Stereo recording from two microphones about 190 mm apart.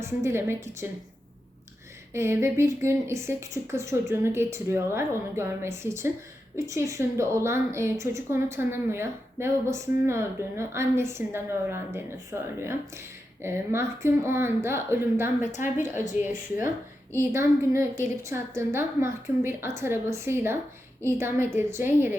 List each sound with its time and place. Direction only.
0.0 s a woman's voice: 15° right (ahead or behind)
2.1 s a woman's voice: 15° right (ahead or behind)
15.6 s a woman's voice: 45° left (ahead or behind)
16.0 s a woman's voice: 10° right (ahead or behind)